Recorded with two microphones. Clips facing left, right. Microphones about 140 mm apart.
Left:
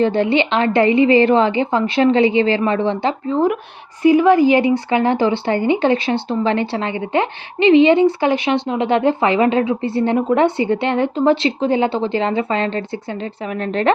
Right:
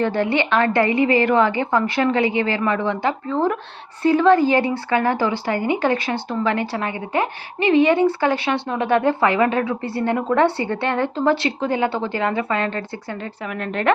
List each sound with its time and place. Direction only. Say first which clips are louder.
0.0 s speech: left 4 dB; 20° left (ahead or behind)